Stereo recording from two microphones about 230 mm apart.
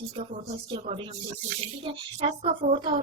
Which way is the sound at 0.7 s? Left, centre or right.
Right.